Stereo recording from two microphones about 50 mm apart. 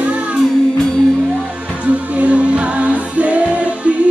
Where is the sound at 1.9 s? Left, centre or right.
Right.